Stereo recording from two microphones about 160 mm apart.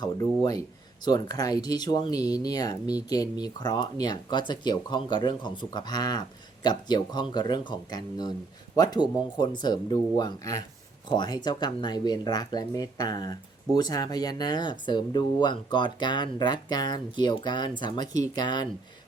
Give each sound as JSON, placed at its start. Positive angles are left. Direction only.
{"t": 1.0, "sound": "speech", "side_deg": 25}